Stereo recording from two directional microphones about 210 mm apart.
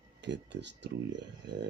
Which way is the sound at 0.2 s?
55° right (ahead or behind).